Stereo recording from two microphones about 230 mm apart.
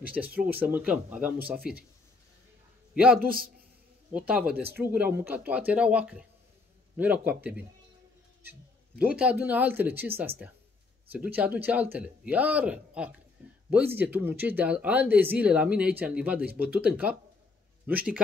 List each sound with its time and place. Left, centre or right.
0.2 s speech: centre
1.6 s a man's voice: right
2.9 s a sound: centre
3.2 s a man's voice: right
4.1 s speech: centre